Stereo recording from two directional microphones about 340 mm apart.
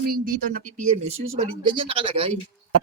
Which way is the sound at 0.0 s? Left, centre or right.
Right.